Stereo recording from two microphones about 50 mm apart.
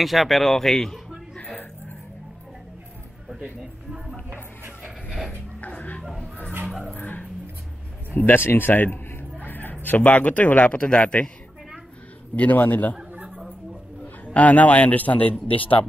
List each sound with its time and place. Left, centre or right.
0.0 s speech: centre
4.8 s a sound: centre
5.7 s music: left
7.0 s music: left
8.1 s speech: left
8.4 s a man's voice: left
12.4 s a man's voice: left
14.2 s a man's voice: left